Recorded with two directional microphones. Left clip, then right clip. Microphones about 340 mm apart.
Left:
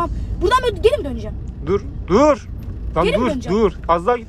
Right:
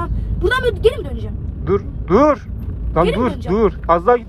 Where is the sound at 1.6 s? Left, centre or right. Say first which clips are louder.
Right 2 dB; centre.